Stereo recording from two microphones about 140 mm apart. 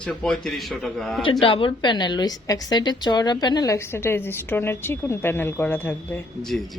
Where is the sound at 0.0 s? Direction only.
5° left (ahead or behind).